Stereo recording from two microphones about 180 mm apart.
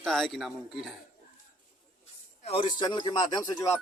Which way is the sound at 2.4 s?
25° left (ahead or behind).